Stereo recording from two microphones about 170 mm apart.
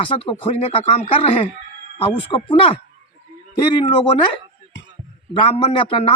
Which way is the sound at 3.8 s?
30° left (ahead or behind).